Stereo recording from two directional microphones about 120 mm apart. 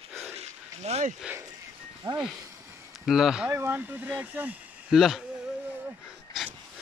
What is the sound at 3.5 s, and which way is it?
Speech, 20° right (ahead or behind).